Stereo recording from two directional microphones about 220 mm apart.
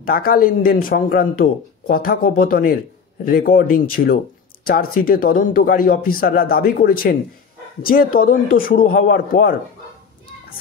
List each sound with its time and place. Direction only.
0.0 s a man's voice: 40° left (ahead or behind)